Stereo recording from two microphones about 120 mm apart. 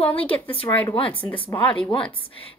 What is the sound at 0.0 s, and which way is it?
Speech, 50° left (ahead or behind).